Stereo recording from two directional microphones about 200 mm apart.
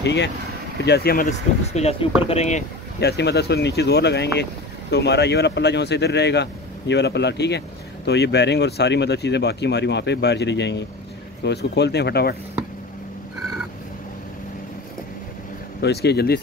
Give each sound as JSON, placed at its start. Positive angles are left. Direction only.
{"t": 0.0, "sound": "speech", "side_deg": 60}
{"t": 1.7, "sound": "speech", "side_deg": 30}
{"t": 3.0, "sound": "speech", "side_deg": 55}
{"t": 15.8, "sound": "speech", "side_deg": 55}